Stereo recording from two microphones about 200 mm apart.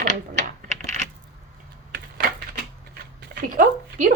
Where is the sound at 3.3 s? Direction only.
45° right (ahead or behind).